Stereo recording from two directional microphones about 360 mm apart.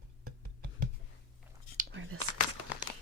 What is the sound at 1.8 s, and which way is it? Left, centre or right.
Whispering, right.